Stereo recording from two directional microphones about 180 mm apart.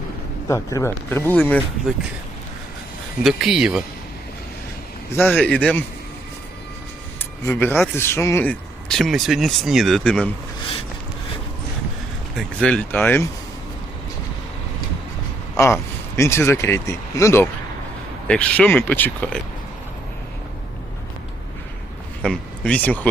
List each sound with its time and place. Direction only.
0.4 s speech: 15° left (ahead or behind)
3.4 s speech: 5° right (ahead or behind)
5.1 s speech: 10° left (ahead or behind)
7.4 s speech: 10° left (ahead or behind)
12.3 s speech: centre (ahead or behind)
15.5 s speech: 15° left (ahead or behind)
22.2 s speech: 5° left (ahead or behind)